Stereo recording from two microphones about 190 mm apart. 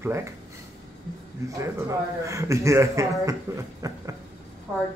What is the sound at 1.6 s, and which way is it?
A man's voice, 15° right (ahead or behind).